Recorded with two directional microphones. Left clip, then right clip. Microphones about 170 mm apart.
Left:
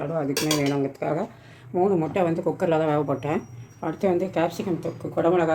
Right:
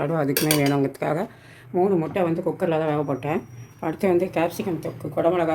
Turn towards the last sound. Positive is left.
turn(degrees=-5)  # may be behind; listen again after turning